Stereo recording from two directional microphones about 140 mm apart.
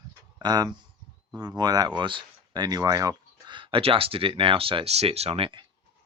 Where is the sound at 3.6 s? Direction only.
40° right (ahead or behind).